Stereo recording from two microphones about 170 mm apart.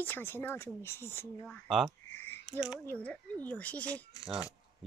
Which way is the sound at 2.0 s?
15° left (ahead or behind).